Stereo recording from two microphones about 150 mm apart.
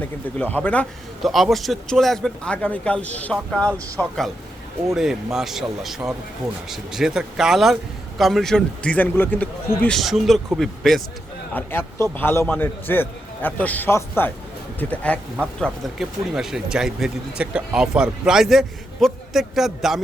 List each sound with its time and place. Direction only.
0.3 s a man's voice: 10° left (ahead or behind)
4.9 s a man's voice: 5° right (ahead or behind)
11.5 s a man's voice: 15° left (ahead or behind); by 20.0 s centre (ahead or behind)